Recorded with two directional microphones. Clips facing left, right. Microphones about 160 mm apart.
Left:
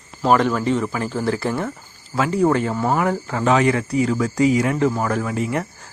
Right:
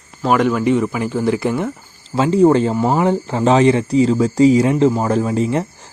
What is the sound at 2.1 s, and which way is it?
Speech, 25° right (ahead or behind).